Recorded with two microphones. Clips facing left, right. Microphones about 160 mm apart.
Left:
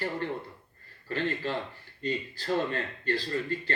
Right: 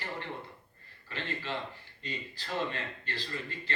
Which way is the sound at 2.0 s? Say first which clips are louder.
Left 10 dB; 40° left (ahead or behind).